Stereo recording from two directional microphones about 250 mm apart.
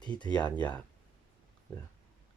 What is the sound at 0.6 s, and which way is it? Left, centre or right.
Speech, centre.